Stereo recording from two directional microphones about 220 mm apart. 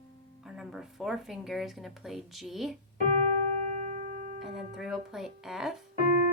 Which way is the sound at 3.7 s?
35° right (ahead or behind).